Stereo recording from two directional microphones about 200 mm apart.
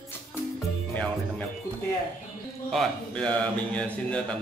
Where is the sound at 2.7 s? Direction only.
5° left (ahead or behind).